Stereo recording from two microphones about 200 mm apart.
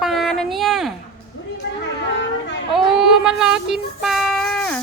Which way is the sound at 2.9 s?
Centre (ahead or behind).